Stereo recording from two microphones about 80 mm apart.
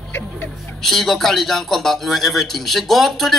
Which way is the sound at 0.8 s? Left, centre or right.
Centre.